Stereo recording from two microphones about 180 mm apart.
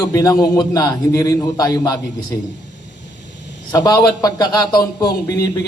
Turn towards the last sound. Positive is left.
turn(degrees=20)  # may be behind; listen again after turning